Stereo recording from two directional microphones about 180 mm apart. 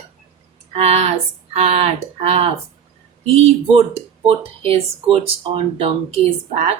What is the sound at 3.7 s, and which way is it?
Speech, 35° right (ahead or behind).